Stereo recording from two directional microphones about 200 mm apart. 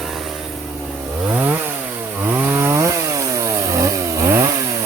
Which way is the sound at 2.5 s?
15° right (ahead or behind).